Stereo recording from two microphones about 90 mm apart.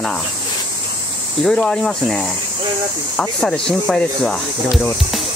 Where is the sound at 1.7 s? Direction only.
10° left (ahead or behind).